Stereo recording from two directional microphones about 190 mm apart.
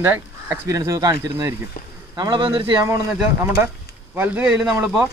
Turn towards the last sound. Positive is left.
turn(degrees=-5)  # may be behind; listen again after turning